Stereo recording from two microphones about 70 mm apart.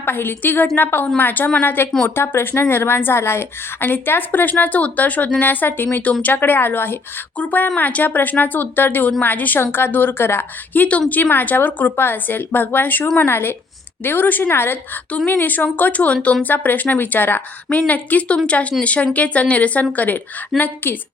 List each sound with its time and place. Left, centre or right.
0.0 s a woman's voice: left
10.8 s a woman's voice: centre
20.5 s a woman's voice: centre